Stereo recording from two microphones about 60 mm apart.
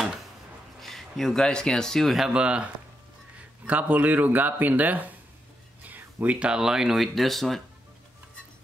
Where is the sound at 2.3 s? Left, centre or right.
Centre.